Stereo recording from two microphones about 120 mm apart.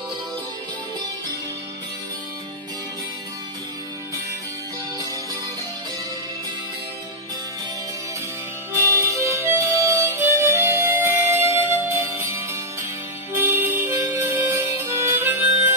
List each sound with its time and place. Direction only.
8.9 s harmonica: 25° right (ahead or behind)
13.3 s music: 20° right (ahead or behind)